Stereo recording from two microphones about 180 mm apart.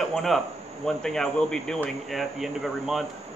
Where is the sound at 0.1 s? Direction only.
Centre (ahead or behind).